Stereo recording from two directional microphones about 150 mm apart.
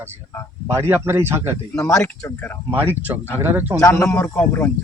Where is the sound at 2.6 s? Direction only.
15° right (ahead or behind).